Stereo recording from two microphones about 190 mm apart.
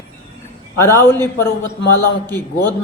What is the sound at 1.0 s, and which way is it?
Speech, 10° left (ahead or behind).